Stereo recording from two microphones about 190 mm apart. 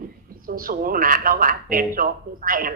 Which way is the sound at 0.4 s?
50° right (ahead or behind).